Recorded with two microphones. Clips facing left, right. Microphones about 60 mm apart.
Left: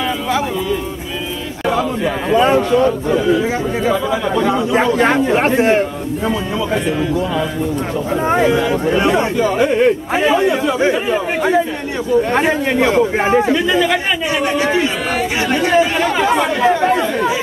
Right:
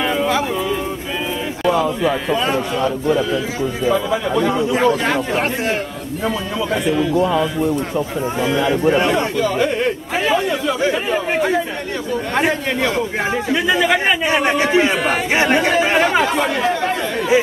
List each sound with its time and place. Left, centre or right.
1.7 s speech: centre
4.7 s a man's voice: left
6.2 s speech: centre
9.0 s speech: centre
13.5 s speech: centre
14.3 s speech: right
15.3 s speech: right
16.3 s a man's voice: centre